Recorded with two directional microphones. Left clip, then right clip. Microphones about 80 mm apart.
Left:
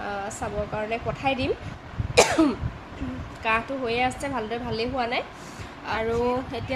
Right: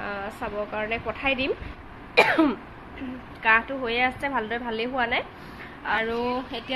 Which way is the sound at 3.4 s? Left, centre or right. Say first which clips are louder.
Right 3 dB; centre.